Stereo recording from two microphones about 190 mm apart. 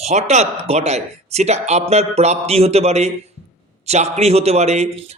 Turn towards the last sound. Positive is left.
turn(degrees=-35)  # may be behind; listen again after turning